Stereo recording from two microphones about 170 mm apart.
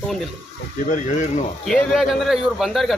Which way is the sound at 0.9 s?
45° left (ahead or behind).